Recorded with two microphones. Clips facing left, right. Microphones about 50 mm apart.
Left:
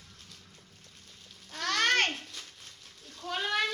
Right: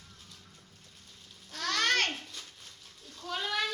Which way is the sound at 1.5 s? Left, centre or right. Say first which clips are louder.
Left 2 dB; left.